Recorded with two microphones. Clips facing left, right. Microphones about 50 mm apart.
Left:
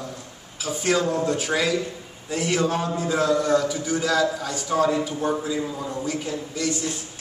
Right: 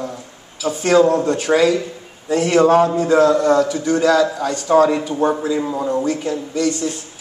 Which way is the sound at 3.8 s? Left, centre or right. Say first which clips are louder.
Right 7 dB; right.